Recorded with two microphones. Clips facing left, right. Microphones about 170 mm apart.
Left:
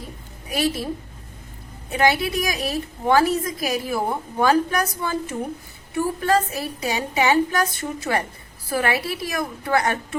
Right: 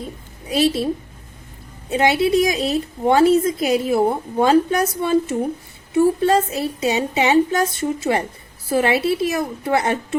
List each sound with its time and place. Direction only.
0.4 s a woman's voice: 30° right (ahead or behind)
1.9 s a woman's voice: 25° right (ahead or behind)